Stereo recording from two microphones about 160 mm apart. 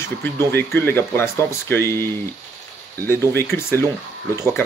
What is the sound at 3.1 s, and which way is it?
Speech, 15° left (ahead or behind).